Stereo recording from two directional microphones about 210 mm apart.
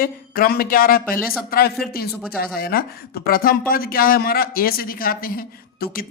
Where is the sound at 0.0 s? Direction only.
45° left (ahead or behind).